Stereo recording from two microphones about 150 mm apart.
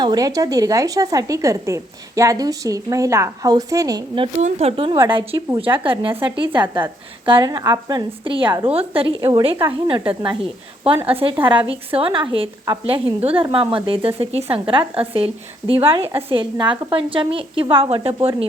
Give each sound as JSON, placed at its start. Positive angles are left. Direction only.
{"t": 0.0, "sound": "a woman's voice", "side_deg": -25}
{"t": 4.4, "sound": "speech", "side_deg": -55}
{"t": 5.0, "sound": "a woman's voice", "side_deg": -35}